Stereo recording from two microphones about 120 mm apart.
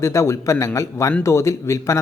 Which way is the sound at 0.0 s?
25° left (ahead or behind).